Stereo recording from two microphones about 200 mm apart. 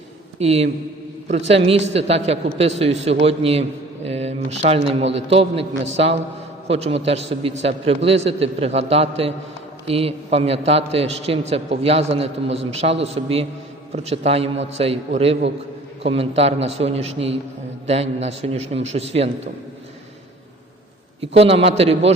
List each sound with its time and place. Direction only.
0.3 s a man's voice: 30° right (ahead or behind)
21.2 s a man's voice: 30° right (ahead or behind)